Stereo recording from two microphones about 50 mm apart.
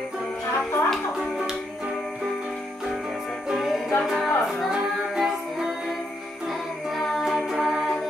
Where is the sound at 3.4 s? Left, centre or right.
Centre.